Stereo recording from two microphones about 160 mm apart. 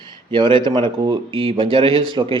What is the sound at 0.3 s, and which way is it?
Speech, 30° right (ahead or behind).